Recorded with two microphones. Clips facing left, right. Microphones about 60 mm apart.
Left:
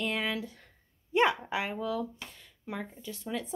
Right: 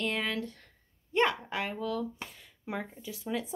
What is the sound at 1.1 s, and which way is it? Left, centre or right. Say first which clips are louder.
Speech: left 2 dB; centre.